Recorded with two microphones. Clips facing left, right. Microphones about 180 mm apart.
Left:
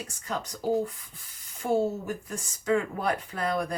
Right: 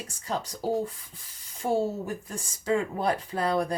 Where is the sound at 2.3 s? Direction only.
30° right (ahead or behind).